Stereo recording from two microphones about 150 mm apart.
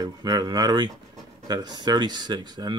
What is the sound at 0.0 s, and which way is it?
Speech, 25° right (ahead or behind).